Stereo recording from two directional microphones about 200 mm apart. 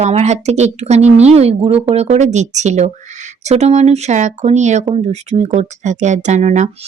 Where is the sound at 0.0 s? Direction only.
35° right (ahead or behind).